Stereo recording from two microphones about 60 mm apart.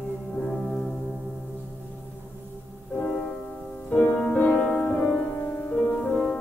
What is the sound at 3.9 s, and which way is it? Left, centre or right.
Music, left.